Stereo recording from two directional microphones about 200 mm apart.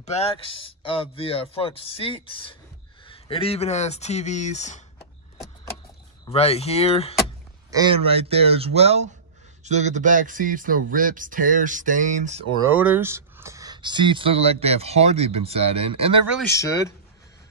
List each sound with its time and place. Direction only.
0.0 s speech: 30° left (ahead or behind)
6.3 s speech: 30° left (ahead or behind)
7.7 s speech: 25° right (ahead or behind)
12.7 s speech: 10° right (ahead or behind); by 16.2 s 30° right (ahead or behind)
16.4 s speech: 15° left (ahead or behind)